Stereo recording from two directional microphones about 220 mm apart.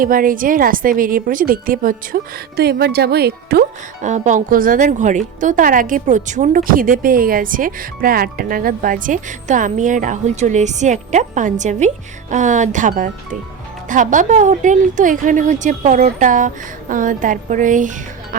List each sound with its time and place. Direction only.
0.0 s a woman's voice: 40° right (ahead or behind)
4.1 s a woman's voice: 35° right (ahead or behind)